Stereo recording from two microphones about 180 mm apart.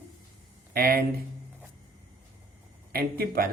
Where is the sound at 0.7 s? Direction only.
55° right (ahead or behind).